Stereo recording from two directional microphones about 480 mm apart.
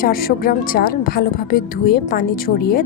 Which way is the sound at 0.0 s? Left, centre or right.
Centre.